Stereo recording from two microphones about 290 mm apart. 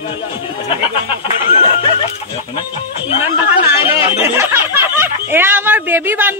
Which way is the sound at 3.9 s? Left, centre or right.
Centre.